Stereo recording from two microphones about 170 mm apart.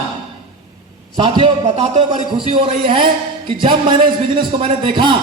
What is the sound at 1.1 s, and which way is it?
Speech, 35° right (ahead or behind).